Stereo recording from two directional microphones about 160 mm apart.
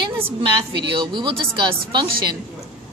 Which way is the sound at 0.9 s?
30° right (ahead or behind).